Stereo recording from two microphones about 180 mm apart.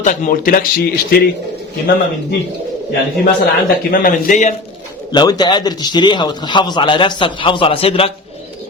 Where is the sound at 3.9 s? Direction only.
50° left (ahead or behind).